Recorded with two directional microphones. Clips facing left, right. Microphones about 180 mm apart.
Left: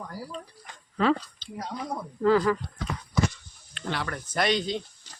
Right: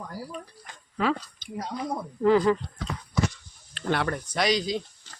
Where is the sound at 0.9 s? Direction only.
10° right (ahead or behind).